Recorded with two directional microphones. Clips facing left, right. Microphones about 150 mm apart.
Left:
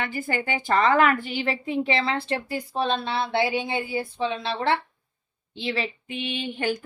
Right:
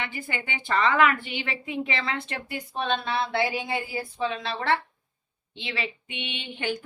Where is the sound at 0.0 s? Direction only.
40° left (ahead or behind).